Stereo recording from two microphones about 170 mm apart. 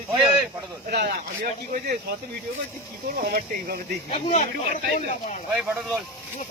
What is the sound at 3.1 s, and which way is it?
Speech, 60° right (ahead or behind).